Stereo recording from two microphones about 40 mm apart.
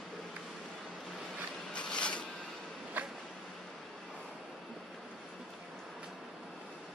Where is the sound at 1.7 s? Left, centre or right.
Left.